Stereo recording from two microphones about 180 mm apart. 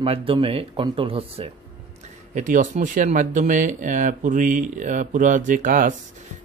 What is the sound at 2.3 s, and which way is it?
Speech, 45° right (ahead or behind).